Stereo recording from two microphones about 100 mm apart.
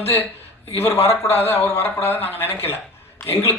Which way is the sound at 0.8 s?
25° left (ahead or behind).